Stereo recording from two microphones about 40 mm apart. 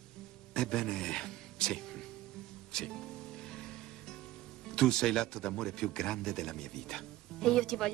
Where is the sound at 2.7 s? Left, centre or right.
Centre.